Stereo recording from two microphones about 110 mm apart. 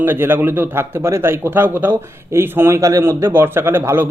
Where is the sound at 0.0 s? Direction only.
20° right (ahead or behind).